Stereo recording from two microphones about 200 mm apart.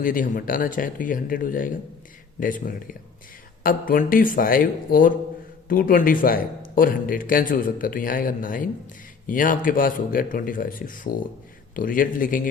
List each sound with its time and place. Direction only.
0.0 s a man's voice: 45° left (ahead or behind)